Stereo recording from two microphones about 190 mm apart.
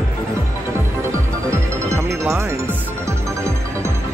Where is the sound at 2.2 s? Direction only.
10° right (ahead or behind).